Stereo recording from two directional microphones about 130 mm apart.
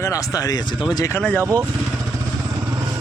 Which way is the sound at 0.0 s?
25° left (ahead or behind).